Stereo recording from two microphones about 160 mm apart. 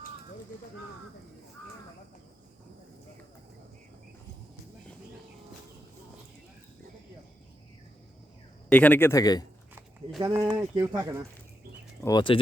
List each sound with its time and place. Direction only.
8.7 s speech: 10° left (ahead or behind)
10.2 s speech: 20° right (ahead or behind)
12.0 s speech: 30° left (ahead or behind)